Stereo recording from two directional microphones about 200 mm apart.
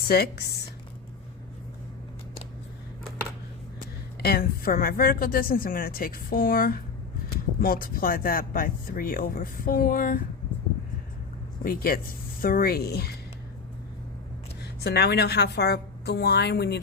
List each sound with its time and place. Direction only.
0.1 s speech: 50° left (ahead or behind)
4.2 s speech: 50° left (ahead or behind)
11.6 s speech: 45° left (ahead or behind)
14.6 s a woman's voice: 55° left (ahead or behind)